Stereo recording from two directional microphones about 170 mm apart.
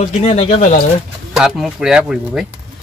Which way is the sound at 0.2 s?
40° left (ahead or behind).